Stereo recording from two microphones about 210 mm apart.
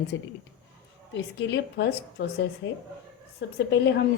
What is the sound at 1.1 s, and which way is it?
A woman's voice, 55° left (ahead or behind).